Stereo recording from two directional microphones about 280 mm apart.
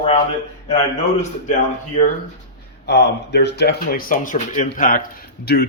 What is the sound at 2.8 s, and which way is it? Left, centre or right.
A man's voice, left.